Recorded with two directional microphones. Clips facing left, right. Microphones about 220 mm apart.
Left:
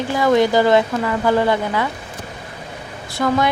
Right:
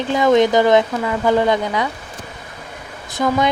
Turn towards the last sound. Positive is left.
turn(degrees=-20)  # may be behind; listen again after turning